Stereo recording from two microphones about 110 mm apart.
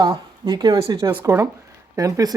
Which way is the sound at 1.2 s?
25° right (ahead or behind).